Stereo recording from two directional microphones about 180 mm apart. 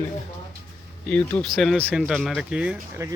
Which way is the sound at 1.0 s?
5° left (ahead or behind).